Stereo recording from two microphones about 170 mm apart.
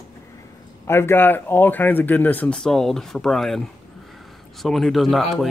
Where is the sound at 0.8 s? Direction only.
15° left (ahead or behind).